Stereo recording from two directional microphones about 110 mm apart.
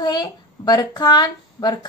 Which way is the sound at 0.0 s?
35° left (ahead or behind).